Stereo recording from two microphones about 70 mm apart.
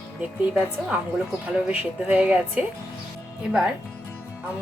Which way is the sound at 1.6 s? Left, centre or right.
Right.